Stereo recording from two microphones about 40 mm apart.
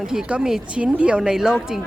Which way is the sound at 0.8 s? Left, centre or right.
Right.